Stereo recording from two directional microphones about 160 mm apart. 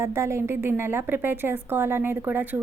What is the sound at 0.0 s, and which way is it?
Speech, 15° right (ahead or behind).